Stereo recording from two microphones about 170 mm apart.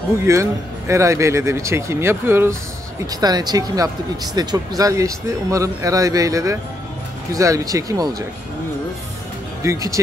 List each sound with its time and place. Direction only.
0.2 s speech: 15° right (ahead or behind)
9.6 s speech: 20° right (ahead or behind)